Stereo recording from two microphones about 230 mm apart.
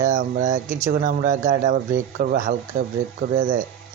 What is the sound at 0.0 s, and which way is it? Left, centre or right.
Speech, right.